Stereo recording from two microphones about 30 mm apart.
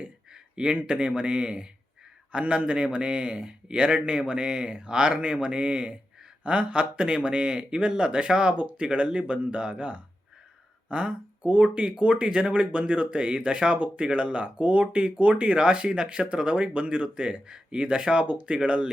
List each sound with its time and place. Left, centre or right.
0.5 s a man's voice: right
11.4 s a man's voice: right